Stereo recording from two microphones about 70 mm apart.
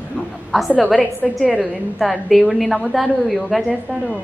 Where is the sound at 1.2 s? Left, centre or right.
Centre.